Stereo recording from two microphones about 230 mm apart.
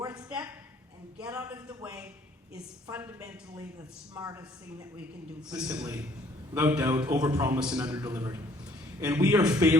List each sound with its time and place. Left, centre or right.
0.2 s a sound: centre
4.1 s a man's voice: centre
5.5 s a man's voice: centre